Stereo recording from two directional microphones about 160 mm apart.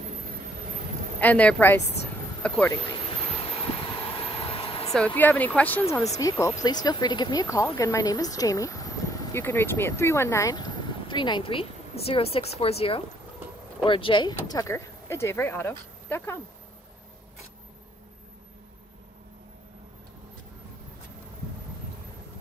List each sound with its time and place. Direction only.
1.2 s speech: 10° left (ahead or behind)
3.0 s vehicle: 35° left (ahead or behind)
4.9 s speech: 10° left (ahead or behind)